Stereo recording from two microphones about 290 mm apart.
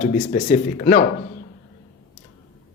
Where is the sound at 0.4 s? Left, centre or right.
Left.